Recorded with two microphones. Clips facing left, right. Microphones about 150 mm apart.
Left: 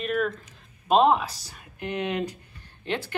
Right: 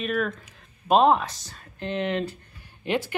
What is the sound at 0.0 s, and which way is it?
Speech, centre (ahead or behind).